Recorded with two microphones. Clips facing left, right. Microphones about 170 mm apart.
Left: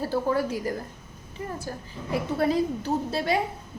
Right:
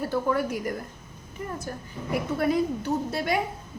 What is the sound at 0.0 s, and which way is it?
Speech, 30° left (ahead or behind).